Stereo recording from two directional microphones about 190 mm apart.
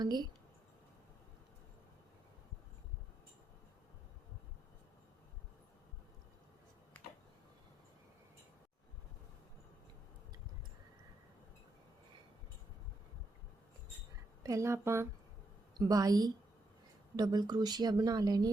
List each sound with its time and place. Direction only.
0.0 s speech: 20° right (ahead or behind)
14.4 s a woman's voice: 15° right (ahead or behind)